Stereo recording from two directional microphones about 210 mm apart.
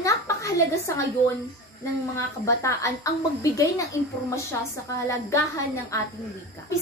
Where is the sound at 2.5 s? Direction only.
15° left (ahead or behind).